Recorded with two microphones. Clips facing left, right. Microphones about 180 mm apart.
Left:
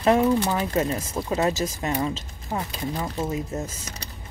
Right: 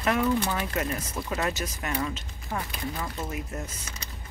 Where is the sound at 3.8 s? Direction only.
35° left (ahead or behind).